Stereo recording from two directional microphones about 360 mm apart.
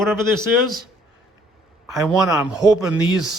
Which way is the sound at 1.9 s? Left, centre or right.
Centre.